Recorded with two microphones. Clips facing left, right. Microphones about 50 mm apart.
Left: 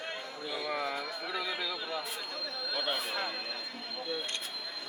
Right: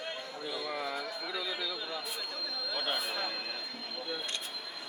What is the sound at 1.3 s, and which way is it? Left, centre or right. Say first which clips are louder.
Speech: left 2 dB; left.